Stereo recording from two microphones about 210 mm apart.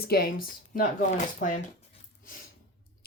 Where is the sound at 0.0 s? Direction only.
45° left (ahead or behind).